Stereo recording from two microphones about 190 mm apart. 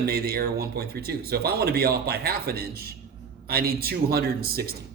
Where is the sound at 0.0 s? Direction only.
55° right (ahead or behind).